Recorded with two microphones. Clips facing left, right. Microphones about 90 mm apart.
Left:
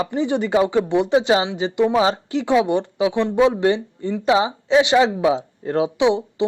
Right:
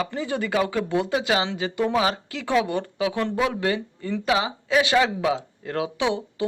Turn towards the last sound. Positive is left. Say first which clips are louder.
# left 7 dB
turn(degrees=20)  # may be behind; listen again after turning